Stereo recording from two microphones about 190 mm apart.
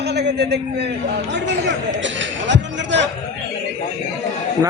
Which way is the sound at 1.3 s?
75° right (ahead or behind).